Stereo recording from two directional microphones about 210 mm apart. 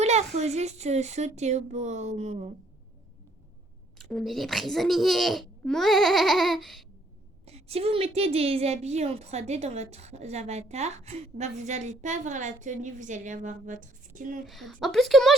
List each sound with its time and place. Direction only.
0.0 s a woman's voice: 30° right (ahead or behind)
3.9 s a child's voice: centre (ahead or behind)
7.4 s a woman's voice: 30° right (ahead or behind)
14.4 s a child's voice: centre (ahead or behind)